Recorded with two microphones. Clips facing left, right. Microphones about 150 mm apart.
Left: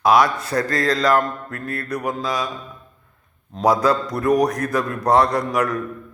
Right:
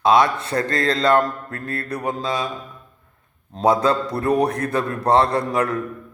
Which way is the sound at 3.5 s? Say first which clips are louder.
Even; 25° right (ahead or behind).